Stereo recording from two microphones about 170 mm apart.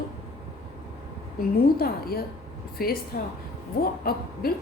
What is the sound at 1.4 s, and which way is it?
A woman's voice, 60° left (ahead or behind).